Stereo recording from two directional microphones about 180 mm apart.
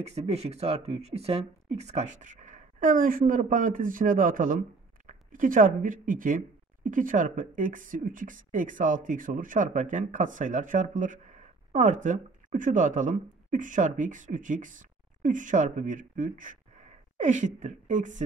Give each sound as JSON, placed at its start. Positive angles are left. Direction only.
{"t": 0.0, "sound": "speech", "side_deg": -35}